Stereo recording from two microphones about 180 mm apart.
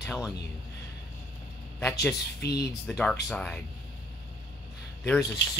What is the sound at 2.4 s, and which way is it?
Speech, 65° left (ahead or behind).